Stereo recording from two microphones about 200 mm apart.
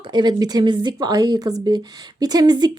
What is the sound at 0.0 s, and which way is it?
Speech, 20° right (ahead or behind).